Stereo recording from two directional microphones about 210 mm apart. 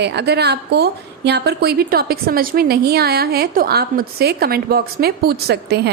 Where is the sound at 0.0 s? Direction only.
50° right (ahead or behind).